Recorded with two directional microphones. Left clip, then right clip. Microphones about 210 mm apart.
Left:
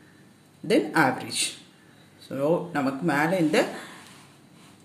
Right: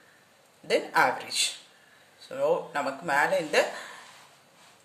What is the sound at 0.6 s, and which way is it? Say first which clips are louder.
Speech: left 2 dB; centre (ahead or behind).